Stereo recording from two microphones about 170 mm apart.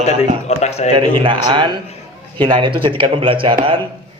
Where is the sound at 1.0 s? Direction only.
30° right (ahead or behind).